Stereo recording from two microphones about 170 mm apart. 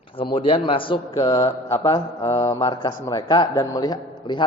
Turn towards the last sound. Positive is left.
turn(degrees=25)  # may be behind; listen again after turning